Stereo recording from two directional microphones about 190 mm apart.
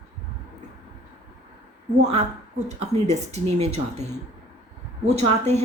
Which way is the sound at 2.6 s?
35° right (ahead or behind).